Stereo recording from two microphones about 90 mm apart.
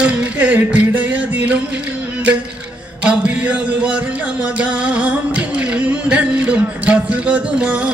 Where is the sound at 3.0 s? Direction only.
15° right (ahead or behind).